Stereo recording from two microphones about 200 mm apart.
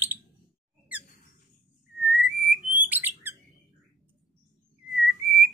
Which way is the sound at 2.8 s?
10° right (ahead or behind).